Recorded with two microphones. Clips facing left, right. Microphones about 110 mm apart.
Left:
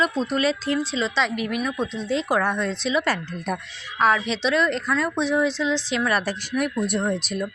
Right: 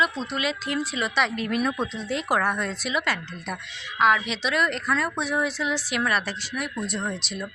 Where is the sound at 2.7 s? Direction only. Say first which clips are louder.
Left 4 dB; 25° left (ahead or behind).